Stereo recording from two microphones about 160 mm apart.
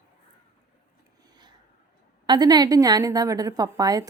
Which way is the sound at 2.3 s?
25° right (ahead or behind).